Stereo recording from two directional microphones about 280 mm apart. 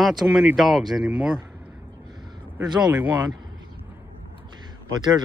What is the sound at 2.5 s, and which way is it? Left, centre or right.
Speech, centre.